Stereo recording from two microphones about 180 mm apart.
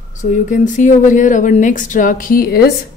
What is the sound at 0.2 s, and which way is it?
A woman's voice, 45° left (ahead or behind).